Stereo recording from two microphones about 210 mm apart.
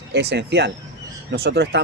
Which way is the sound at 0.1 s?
50° right (ahead or behind).